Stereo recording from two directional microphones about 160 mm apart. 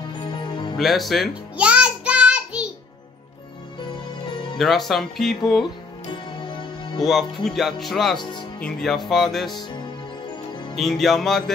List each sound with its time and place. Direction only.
0.2 s music: 30° left (ahead or behind)
0.7 s music: centre (ahead or behind)
4.6 s speech: centre (ahead or behind)
6.4 s music: 30° left (ahead or behind)
7.0 s speech: centre (ahead or behind)
8.2 s speech: 30° left (ahead or behind)
8.5 s speech: 5° left (ahead or behind)
10.7 s speech: centre (ahead or behind)